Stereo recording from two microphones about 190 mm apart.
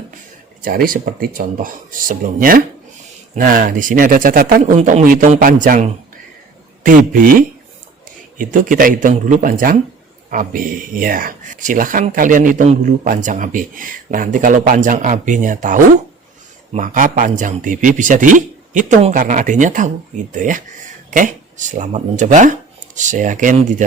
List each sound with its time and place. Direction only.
0.6 s speech: 50° right (ahead or behind)